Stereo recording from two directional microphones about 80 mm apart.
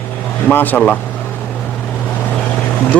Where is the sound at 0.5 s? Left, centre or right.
Left.